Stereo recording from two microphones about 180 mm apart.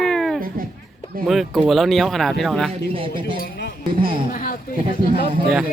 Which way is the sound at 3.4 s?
70° left (ahead or behind).